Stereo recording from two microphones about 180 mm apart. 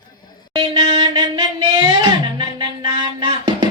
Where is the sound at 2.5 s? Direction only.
25° right (ahead or behind).